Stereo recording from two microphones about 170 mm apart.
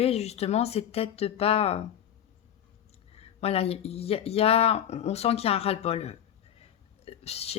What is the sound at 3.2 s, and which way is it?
A woman's voice, 35° left (ahead or behind).